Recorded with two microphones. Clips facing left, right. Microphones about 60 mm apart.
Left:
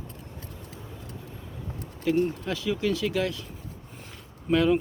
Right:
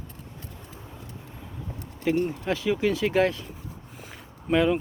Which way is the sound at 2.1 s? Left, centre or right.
Right.